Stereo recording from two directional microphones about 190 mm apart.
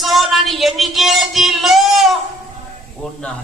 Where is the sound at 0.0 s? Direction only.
Centre (ahead or behind).